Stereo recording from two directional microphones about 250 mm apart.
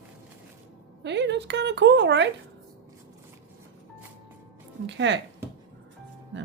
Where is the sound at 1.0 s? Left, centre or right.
Right.